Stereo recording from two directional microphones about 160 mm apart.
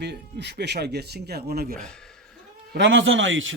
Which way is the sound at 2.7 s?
90° right.